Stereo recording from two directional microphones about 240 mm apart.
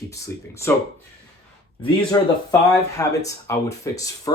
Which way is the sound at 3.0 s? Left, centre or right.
Centre.